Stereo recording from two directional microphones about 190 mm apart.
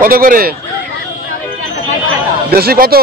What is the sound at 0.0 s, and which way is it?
Speech, 50° right (ahead or behind).